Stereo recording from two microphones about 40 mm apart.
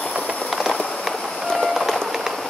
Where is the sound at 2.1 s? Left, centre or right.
Centre.